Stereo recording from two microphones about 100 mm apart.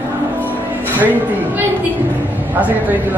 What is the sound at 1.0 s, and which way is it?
Speech, 15° right (ahead or behind).